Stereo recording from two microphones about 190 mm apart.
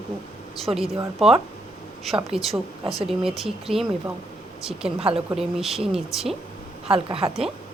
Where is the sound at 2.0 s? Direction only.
Centre (ahead or behind).